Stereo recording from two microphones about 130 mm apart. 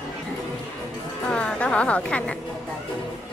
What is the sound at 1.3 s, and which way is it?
Speech, 10° left (ahead or behind).